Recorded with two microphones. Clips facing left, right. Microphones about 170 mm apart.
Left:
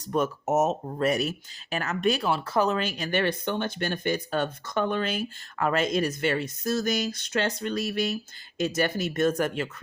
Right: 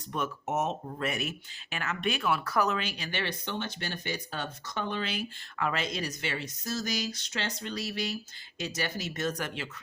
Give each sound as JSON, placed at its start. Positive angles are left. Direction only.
{"t": 0.0, "sound": "speech", "side_deg": 40}
{"t": 2.7, "sound": "speech", "side_deg": 45}